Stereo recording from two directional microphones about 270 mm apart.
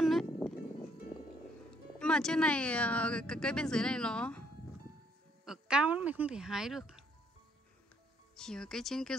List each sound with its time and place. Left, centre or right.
0.0 s music: centre
2.0 s speech: centre
8.4 s speech: centre